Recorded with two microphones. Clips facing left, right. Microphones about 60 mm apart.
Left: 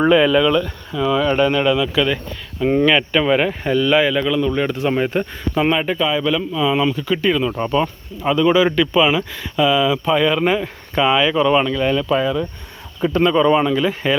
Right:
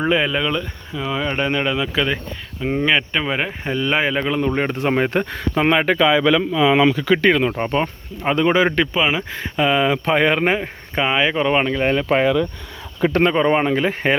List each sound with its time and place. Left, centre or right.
0.1 s speech: centre
2.6 s speech: centre
2.8 s speech: centre
3.8 s speech: right
5.5 s speech: right
5.8 s speech: right
7.6 s speech: right
8.9 s speech: right
9.3 s speech: right
10.9 s speech: right
12.0 s speech: right
13.2 s speech: right